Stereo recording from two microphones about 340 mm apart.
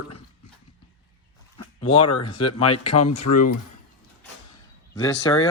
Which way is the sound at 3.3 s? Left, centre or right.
Left.